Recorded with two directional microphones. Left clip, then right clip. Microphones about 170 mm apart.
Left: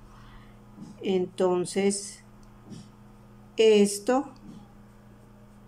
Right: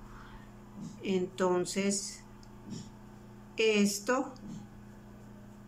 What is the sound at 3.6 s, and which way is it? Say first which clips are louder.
Speech: left 8 dB; 20° left (ahead or behind).